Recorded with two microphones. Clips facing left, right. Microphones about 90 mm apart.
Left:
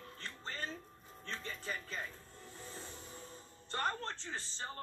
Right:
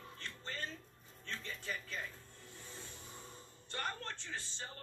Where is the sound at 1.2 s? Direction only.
35° left (ahead or behind).